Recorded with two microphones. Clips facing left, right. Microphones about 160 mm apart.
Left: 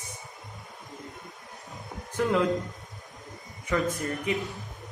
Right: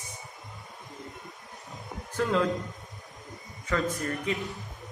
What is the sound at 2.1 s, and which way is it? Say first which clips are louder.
Speech: left 1 dB; 15° left (ahead or behind).